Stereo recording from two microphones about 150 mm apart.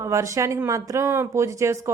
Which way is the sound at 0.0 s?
20° right (ahead or behind).